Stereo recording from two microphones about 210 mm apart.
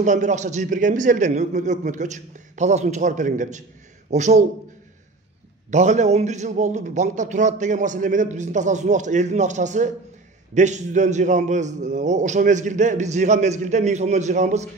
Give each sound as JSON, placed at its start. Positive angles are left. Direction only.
{"t": 0.0, "sound": "a man's voice", "side_deg": -35}
{"t": 5.7, "sound": "a man's voice", "side_deg": -35}